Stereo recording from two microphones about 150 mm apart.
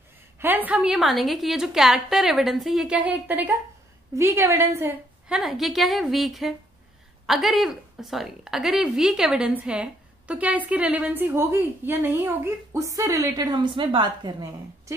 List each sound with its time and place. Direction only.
0.4 s a woman's voice: 10° right (ahead or behind)
5.4 s a woman's voice: centre (ahead or behind); by 15.0 s 25° right (ahead or behind)